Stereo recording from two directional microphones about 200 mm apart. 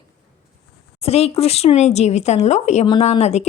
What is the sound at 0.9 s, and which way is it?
Speech, 30° left (ahead or behind).